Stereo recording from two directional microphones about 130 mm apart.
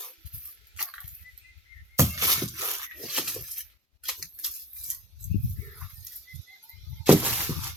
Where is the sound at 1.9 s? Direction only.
25° right (ahead or behind).